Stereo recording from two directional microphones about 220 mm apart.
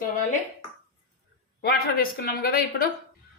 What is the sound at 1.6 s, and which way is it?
Speech, 45° left (ahead or behind).